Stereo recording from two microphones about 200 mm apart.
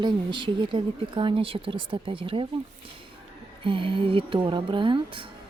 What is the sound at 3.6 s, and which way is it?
A woman's voice, 25° right (ahead or behind).